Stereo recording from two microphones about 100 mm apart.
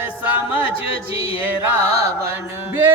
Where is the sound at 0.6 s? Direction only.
65° left (ahead or behind).